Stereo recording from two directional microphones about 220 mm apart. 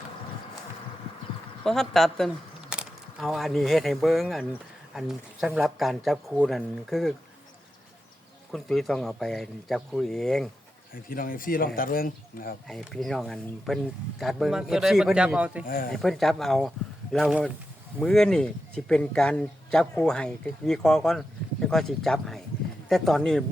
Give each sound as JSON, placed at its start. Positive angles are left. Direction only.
{"t": 1.6, "sound": "speech", "side_deg": 0}
{"t": 8.5, "sound": "speech", "side_deg": 0}
{"t": 10.9, "sound": "speech", "side_deg": 40}
{"t": 12.6, "sound": "speech", "side_deg": 0}
{"t": 15.6, "sound": "speech", "side_deg": 40}
{"t": 15.9, "sound": "speech", "side_deg": 0}